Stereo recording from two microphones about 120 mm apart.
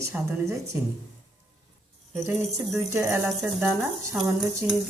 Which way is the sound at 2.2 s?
25° right (ahead or behind).